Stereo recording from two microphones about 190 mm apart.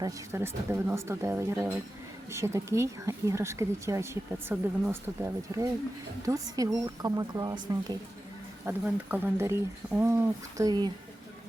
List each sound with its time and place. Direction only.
0.0 s a woman's voice: 15° right (ahead or behind)
8.6 s a woman's voice: 10° right (ahead or behind)